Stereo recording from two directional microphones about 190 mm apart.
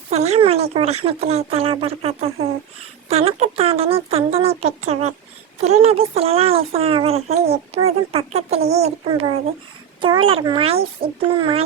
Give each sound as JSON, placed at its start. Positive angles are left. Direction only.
{"t": 0.1, "sound": "a child's voice", "side_deg": -35}